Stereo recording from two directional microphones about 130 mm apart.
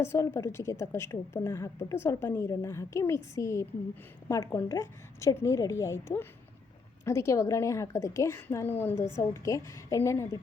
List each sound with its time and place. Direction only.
0.0 s a woman's voice: 20° left (ahead or behind)